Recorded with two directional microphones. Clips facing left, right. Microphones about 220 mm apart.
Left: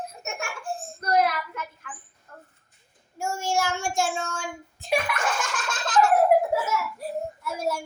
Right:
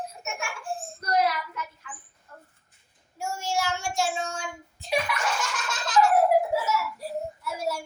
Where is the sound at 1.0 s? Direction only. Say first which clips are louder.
Left 3 dB; 50° left (ahead or behind).